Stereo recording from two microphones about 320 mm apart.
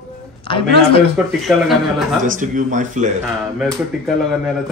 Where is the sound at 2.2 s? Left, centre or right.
Right.